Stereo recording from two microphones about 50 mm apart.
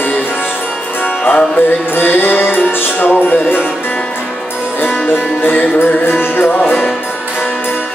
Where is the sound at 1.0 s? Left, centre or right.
Left.